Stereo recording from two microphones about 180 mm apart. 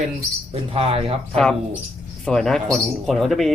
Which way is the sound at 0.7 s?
35° right (ahead or behind).